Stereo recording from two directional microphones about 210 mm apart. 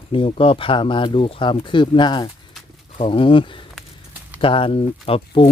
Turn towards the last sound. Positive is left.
turn(degrees=25)  # may be behind; listen again after turning